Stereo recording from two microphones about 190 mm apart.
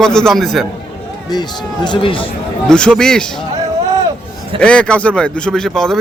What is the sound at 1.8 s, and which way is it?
Speech, 25° left (ahead or behind).